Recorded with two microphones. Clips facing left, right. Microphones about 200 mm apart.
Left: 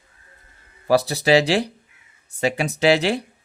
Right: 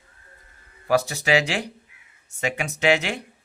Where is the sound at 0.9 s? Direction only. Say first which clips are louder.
Left 4 dB; 35° left (ahead or behind).